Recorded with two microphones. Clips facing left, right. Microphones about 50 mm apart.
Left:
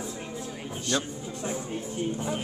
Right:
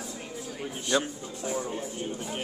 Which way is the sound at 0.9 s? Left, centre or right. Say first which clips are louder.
Right 3 dB; centre.